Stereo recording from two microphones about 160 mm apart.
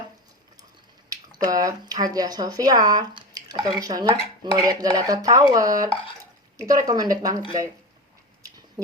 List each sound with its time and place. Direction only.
1.1 s speech: 20° right (ahead or behind)